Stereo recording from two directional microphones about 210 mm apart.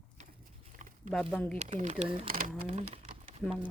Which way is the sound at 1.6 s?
35° right (ahead or behind).